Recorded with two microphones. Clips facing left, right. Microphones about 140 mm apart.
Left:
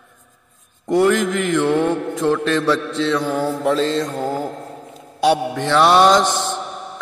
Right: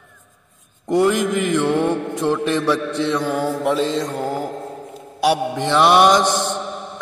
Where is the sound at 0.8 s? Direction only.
15° right (ahead or behind).